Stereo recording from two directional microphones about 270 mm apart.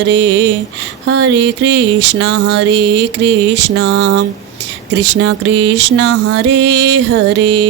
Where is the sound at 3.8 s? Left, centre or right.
Right.